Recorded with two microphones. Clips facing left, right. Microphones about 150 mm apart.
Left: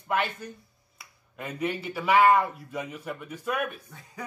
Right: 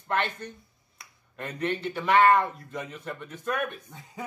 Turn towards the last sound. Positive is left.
turn(degrees=-20)  # may be behind; listen again after turning